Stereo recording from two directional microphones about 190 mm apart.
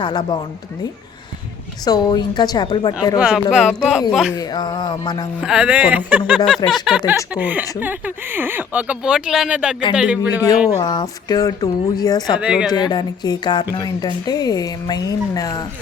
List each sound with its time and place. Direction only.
0.0 s speech: 25° left (ahead or behind)
1.8 s speech: 20° left (ahead or behind)
3.2 s speech: 5° right (ahead or behind)
4.4 s speech: 20° left (ahead or behind)
5.4 s speech: 5° right (ahead or behind)
10.7 s speech: 20° left (ahead or behind)
12.4 s speech: 5° right (ahead or behind)
12.9 s speech: 20° left (ahead or behind)